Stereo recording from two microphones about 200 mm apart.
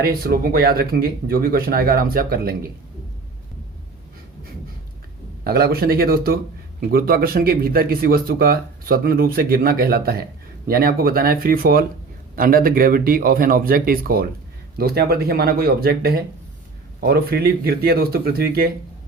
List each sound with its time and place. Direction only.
0.0 s a man's voice: 50° right (ahead or behind)
5.4 s a man's voice: 50° right (ahead or behind)